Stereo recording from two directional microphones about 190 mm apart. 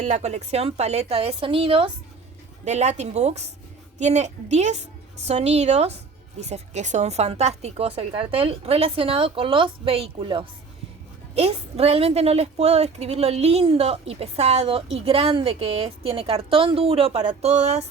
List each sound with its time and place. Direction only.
0.0 s speech: 35° right (ahead or behind)